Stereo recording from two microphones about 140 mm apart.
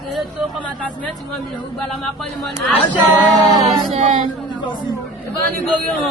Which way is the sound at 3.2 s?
Centre (ahead or behind).